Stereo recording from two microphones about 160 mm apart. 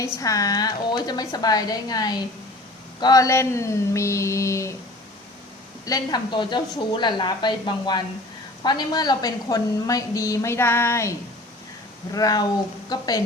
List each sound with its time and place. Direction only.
0.2 s a woman's voice: 20° left (ahead or behind)
3.0 s a sound: 20° left (ahead or behind)
5.8 s a woman's voice: 25° left (ahead or behind)
12.1 s a woman's voice: 25° left (ahead or behind)